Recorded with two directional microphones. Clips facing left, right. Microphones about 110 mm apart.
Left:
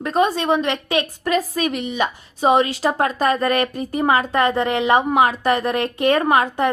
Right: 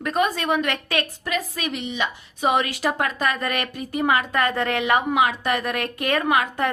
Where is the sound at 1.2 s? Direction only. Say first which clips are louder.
Left 7 dB; 40° left (ahead or behind).